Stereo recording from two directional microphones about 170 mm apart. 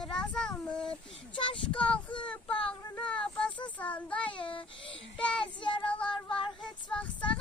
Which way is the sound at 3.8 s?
10° left (ahead or behind).